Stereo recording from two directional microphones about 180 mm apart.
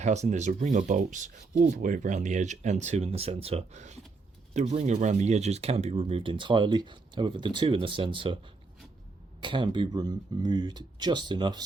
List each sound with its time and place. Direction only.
0.0 s speech: 40° right (ahead or behind)
9.4 s speech: 25° right (ahead or behind)